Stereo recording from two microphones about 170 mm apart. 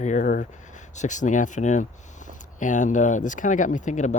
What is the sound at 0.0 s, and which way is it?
Speech, 50° left (ahead or behind).